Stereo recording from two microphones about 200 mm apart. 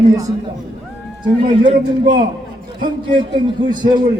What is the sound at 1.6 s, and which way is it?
A man's voice, 25° right (ahead or behind).